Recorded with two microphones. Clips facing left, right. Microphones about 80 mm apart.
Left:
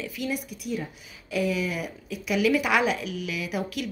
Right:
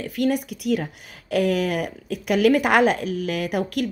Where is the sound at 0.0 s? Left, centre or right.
Right.